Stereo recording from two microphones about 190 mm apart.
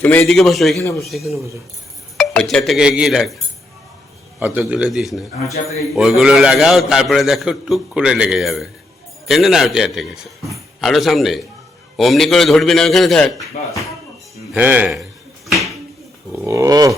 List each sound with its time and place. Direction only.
0.0 s a man's voice: 10° left (ahead or behind)
0.8 s speech: 15° left (ahead or behind)
1.0 s a man's voice: centre (ahead or behind)
4.4 s a man's voice: 10° right (ahead or behind)
14.5 s speech: 5° right (ahead or behind)
16.4 s speech: 15° right (ahead or behind)